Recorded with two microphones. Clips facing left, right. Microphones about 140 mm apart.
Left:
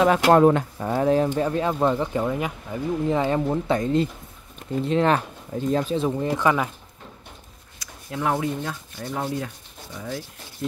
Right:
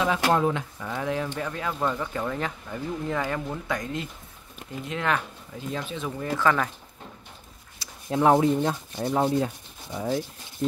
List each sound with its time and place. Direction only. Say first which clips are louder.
0.3 s speech: left 8 dB; 55° left (ahead or behind); by 6.2 s 35° left (ahead or behind)
6.2 s speech: right 3 dB; 15° left (ahead or behind)
7.8 s speech: right 5 dB; 30° right (ahead or behind)